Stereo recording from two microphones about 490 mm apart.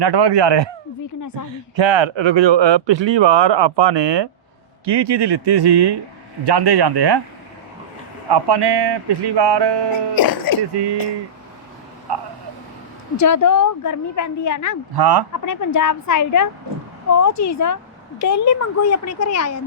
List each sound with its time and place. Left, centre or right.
0.0 s speech: right
1.7 s speech: right
8.3 s speech: right
10.2 s speech: left
13.1 s a woman's voice: left
14.9 s speech: right
15.3 s a woman's voice: left